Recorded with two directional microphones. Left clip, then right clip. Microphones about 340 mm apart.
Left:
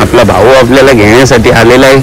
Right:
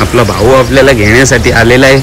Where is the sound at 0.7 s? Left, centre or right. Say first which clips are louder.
Left 2 dB; left.